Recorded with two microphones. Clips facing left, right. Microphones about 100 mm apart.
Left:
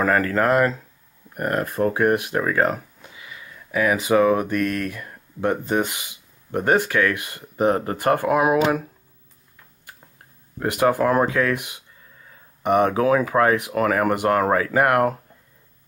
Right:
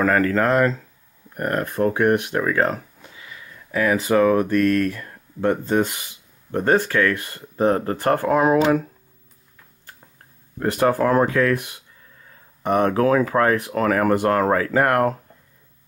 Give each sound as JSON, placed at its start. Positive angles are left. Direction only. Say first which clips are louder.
{"t": 0.0, "sound": "speech", "louder": "right 1 dB", "side_deg": 5}
{"t": 10.6, "sound": "speech", "louder": "even", "side_deg": 15}